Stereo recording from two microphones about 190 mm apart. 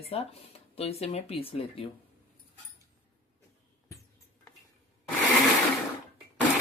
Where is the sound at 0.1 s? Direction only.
30° left (ahead or behind).